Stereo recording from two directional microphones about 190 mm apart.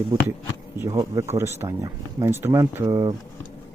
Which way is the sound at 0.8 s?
15° right (ahead or behind).